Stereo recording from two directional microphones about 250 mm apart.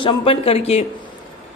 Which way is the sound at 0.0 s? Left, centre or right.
Left.